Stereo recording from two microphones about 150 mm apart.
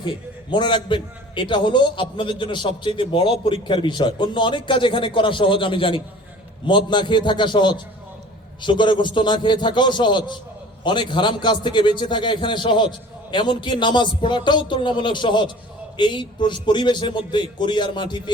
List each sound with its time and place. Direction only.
0.5 s a man's voice: 30° left (ahead or behind)